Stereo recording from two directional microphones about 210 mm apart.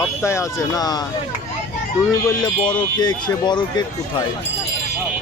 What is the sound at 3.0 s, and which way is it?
Speech, 20° left (ahead or behind).